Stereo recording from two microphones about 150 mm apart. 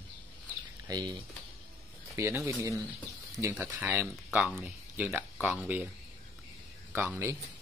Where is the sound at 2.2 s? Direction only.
20° right (ahead or behind).